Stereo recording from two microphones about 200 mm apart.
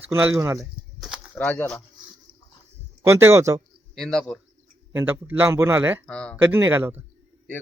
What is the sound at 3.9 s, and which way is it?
Speech, centre (ahead or behind).